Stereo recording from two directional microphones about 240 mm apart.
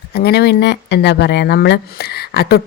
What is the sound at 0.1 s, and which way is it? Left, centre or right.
Speech, left.